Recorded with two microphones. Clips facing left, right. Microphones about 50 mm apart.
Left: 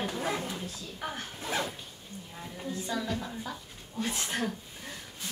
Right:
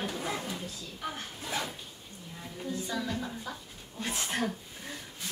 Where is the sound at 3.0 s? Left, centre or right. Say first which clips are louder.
Even; centre.